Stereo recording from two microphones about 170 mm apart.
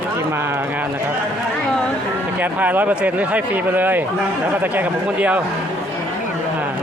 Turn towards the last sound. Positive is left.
turn(degrees=-10)  # may be behind; listen again after turning